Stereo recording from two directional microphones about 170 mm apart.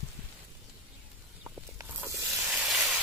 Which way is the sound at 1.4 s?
10° right (ahead or behind).